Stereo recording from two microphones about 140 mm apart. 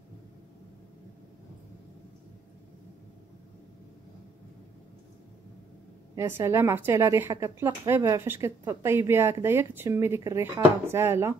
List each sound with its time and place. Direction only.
6.1 s a woman's voice: 20° right (ahead or behind)